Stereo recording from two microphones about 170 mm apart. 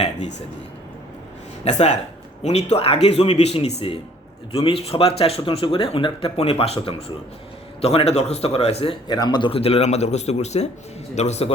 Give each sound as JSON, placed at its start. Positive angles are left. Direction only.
{"t": 1.6, "sound": "a man's voice", "side_deg": 45}